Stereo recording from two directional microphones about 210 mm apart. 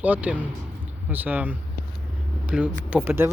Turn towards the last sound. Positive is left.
turn(degrees=-10)  # may be behind; listen again after turning